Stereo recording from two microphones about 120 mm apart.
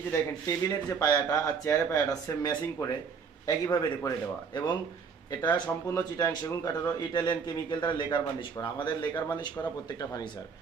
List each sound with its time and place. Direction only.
0.1 s speech: 30° left (ahead or behind)
5.3 s speech: 35° left (ahead or behind)